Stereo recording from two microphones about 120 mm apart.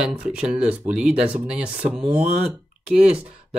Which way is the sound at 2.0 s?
75° right (ahead or behind).